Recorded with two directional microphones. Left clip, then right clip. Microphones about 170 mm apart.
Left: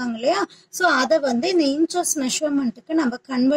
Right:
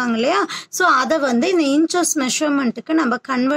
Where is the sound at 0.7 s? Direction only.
40° right (ahead or behind).